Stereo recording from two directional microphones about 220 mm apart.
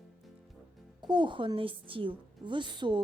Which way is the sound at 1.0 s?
20° right (ahead or behind).